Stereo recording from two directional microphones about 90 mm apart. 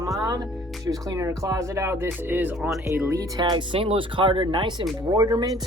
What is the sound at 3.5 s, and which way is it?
Speech, 80° right.